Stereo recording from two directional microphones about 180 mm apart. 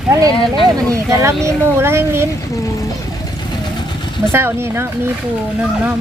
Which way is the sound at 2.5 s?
20° left (ahead or behind).